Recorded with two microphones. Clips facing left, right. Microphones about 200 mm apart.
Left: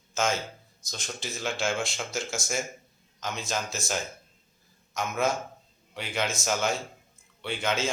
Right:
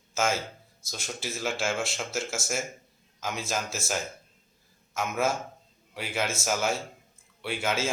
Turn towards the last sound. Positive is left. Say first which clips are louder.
# even
turn(degrees=-5)  # may be behind; listen again after turning